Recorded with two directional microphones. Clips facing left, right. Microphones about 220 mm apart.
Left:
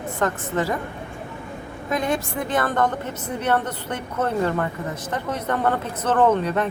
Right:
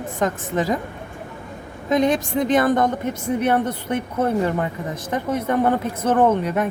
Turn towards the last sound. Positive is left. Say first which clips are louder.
# right 1 dB
turn(degrees=-10)  # may be behind; listen again after turning